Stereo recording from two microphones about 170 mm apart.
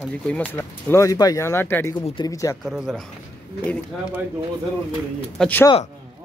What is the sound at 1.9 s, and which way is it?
Speech, 30° left (ahead or behind).